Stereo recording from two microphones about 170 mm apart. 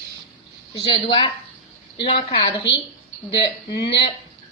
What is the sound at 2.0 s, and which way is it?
A woman's voice, 30° left (ahead or behind).